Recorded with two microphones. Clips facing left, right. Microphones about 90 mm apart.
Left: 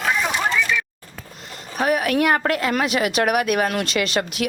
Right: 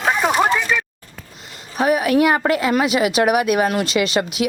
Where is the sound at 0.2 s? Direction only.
50° right (ahead or behind).